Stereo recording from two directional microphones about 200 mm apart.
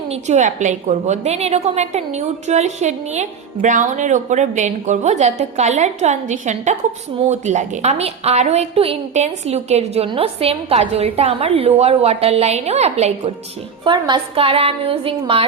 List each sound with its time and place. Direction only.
0.1 s a woman's voice: 35° right (ahead or behind)